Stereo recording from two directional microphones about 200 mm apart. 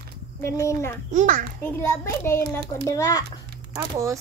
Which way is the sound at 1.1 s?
40° right (ahead or behind).